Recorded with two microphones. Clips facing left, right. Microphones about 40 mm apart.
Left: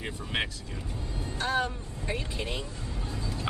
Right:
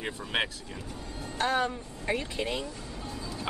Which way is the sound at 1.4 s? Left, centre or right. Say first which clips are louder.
Right 2 dB; right.